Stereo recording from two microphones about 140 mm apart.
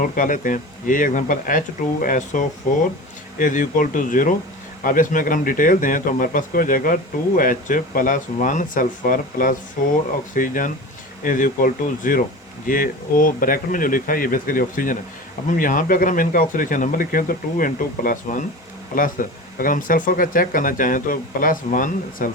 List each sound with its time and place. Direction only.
0.0 s speech: 70° left (ahead or behind)